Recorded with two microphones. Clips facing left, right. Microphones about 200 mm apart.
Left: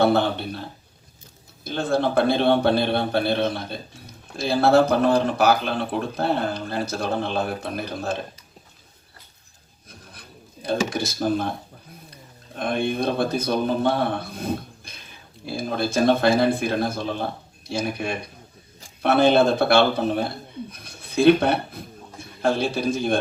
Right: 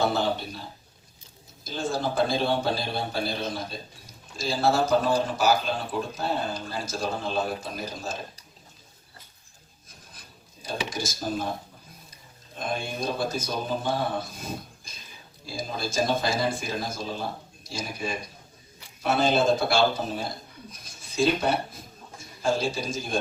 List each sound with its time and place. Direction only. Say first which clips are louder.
0.0 s a man's voice: left 6 dB; 60° left (ahead or behind)
10.2 s rub: left 8 dB; 60° left (ahead or behind)
10.8 s a man's voice: left 7 dB; 60° left (ahead or behind)